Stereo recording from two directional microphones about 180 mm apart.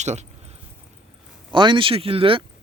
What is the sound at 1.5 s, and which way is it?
Speech, 25° right (ahead or behind).